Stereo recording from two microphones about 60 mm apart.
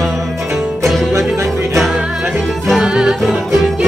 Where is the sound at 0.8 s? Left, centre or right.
Centre.